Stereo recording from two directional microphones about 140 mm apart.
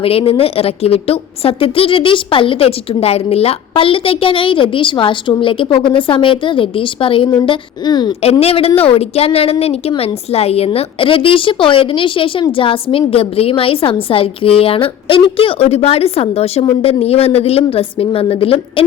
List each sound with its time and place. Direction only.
0.0 s a woman's voice: 40° left (ahead or behind)
8.2 s a woman's voice: 45° left (ahead or behind)